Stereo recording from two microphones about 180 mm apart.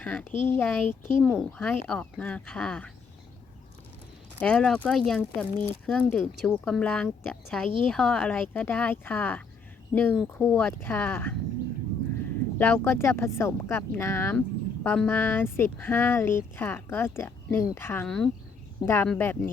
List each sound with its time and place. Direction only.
0.0 s speech: 10° left (ahead or behind)
4.4 s speech: 5° left (ahead or behind)
12.5 s speech: 10° left (ahead or behind)